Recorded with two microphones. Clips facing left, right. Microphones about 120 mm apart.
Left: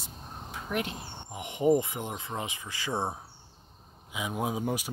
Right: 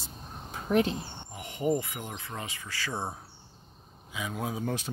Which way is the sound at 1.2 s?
20° left (ahead or behind).